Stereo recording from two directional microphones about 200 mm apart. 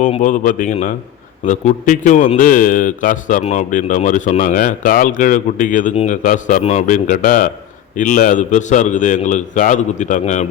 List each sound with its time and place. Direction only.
0.0 s a man's voice: 40° left (ahead or behind)